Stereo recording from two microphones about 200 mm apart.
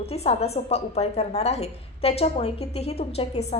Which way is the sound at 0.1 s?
30° left (ahead or behind).